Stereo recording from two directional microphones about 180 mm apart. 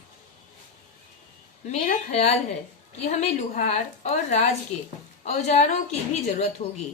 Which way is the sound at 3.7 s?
40° left (ahead or behind).